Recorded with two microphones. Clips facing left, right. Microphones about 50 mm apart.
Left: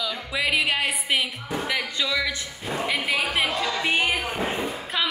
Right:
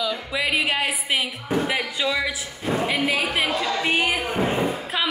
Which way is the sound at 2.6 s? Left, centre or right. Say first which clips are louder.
Right 3 dB; centre.